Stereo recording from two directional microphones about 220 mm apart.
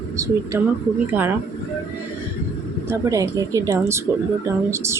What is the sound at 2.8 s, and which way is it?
Speech, 15° right (ahead or behind).